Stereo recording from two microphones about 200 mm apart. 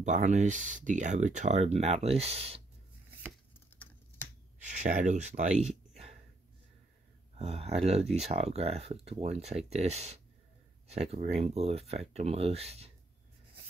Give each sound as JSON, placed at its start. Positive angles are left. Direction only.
{"t": 0.0, "sound": "speech", "side_deg": -35}
{"t": 4.6, "sound": "speech", "side_deg": -35}
{"t": 7.3, "sound": "speech", "side_deg": -30}